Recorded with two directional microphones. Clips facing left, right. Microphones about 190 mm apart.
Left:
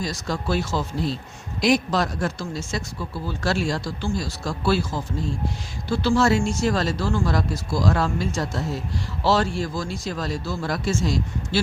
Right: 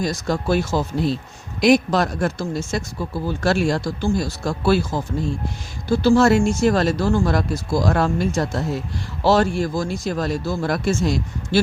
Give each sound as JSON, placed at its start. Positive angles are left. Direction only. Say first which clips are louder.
{"t": 0.0, "sound": "speech", "louder": "right 5 dB", "side_deg": -50}